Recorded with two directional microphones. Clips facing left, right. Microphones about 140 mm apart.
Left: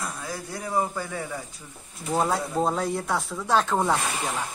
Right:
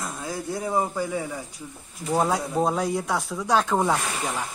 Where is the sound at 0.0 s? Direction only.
20° right (ahead or behind).